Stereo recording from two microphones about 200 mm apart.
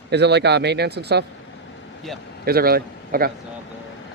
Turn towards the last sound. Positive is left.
turn(degrees=-50)  # may be behind; listen again after turning